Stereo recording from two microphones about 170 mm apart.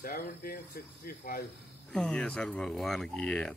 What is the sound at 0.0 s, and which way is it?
Speech, 60° left (ahead or behind).